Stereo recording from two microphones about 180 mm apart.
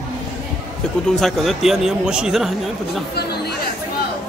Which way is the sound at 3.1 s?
60° left (ahead or behind).